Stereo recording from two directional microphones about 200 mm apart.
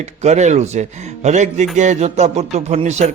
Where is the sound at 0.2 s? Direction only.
35° right (ahead or behind).